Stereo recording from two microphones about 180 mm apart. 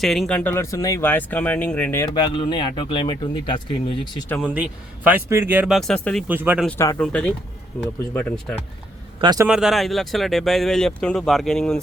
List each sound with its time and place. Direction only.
0.0 s speech: centre (ahead or behind)
2.1 s speech: 25° left (ahead or behind)
4.0 s speech: centre (ahead or behind)
6.2 s speech: 10° right (ahead or behind)
6.7 s speech: 15° left (ahead or behind)
9.2 s speech: 20° right (ahead or behind)
9.5 s speech: centre (ahead or behind)